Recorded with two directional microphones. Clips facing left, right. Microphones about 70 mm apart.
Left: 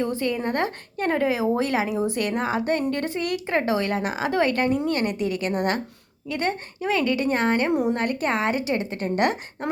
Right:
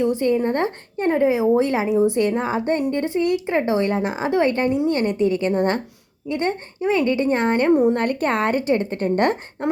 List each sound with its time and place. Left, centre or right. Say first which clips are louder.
0.0 s a woman's voice: right 6 dB; right
7.9 s a woman's voice: right 3 dB; right